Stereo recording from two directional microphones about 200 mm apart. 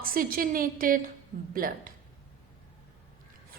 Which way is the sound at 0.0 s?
45° right (ahead or behind).